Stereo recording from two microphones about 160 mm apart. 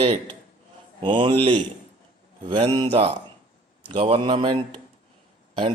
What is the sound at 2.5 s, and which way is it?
Speech, 35° right (ahead or behind).